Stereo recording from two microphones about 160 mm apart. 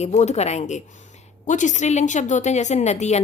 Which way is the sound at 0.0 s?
45° left (ahead or behind).